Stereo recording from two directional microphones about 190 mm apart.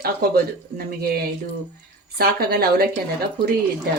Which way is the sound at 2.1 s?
55° right (ahead or behind).